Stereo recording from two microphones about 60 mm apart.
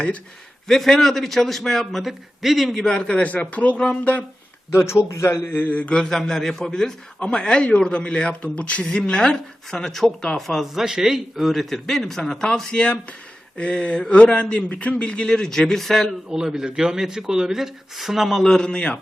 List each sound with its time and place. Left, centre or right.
0.7 s a man's voice: centre
2.8 s a man's voice: centre
4.7 s a man's voice: left; by 12.8 s centre
12.8 s a man's voice: left
16.3 s speech: centre
18.4 s a man's voice: centre